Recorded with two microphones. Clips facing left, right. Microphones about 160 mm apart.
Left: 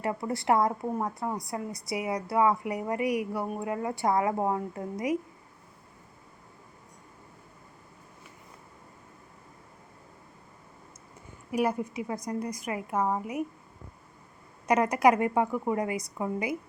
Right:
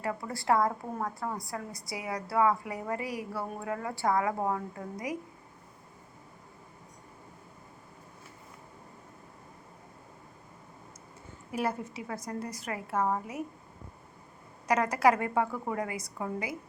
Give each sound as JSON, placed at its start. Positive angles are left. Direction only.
{"t": 0.0, "sound": "a woman's voice", "side_deg": 25}
{"t": 11.5, "sound": "a woman's voice", "side_deg": 15}
{"t": 14.7, "sound": "a woman's voice", "side_deg": 20}